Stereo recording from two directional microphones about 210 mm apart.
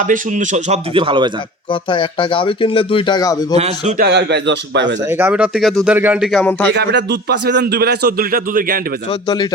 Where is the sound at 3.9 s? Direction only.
50° right (ahead or behind).